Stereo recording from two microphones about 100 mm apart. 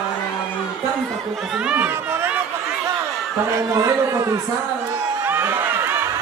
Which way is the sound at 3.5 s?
30° right (ahead or behind).